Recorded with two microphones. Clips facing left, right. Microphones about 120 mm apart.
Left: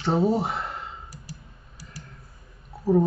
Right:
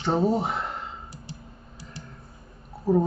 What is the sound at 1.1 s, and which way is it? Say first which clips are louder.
Typing: right 2 dB; 25° right (ahead or behind).